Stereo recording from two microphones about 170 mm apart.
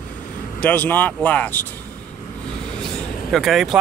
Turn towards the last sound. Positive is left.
turn(degrees=0)  # may be behind; listen again after turning